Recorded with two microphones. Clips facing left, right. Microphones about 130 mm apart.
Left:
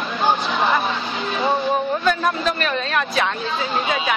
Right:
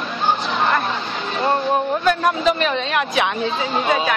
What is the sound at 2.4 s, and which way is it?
Speech, 15° right (ahead or behind).